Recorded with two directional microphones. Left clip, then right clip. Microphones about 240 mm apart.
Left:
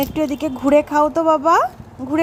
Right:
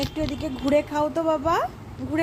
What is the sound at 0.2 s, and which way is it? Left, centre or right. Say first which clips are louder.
A woman's voice: left 8 dB; left.